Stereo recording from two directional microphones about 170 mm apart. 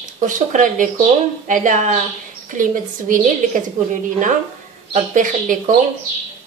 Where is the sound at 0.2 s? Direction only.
50° right (ahead or behind).